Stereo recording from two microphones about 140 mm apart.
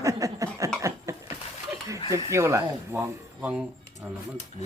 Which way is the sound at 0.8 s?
20° right (ahead or behind).